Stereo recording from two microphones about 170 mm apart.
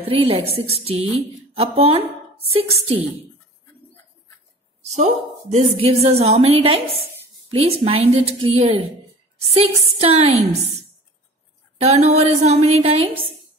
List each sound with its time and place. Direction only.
0.1 s a woman's voice: 35° right (ahead or behind)
4.8 s a woman's voice: 40° right (ahead or behind)
11.8 s a woman's voice: 40° right (ahead or behind)